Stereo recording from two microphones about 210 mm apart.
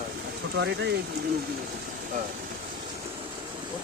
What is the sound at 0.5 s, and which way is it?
Speech, 55° right (ahead or behind).